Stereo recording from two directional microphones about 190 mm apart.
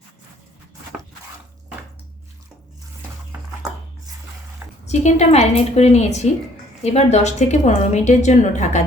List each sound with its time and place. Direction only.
4.9 s a woman's voice: 35° left (ahead or behind)